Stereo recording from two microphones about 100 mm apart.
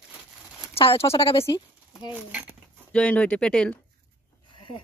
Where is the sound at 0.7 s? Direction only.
75° left (ahead or behind).